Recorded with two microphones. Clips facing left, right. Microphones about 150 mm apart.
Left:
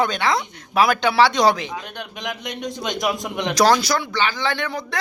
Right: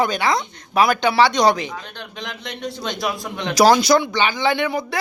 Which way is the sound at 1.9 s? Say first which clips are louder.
Left 3 dB; 15° left (ahead or behind).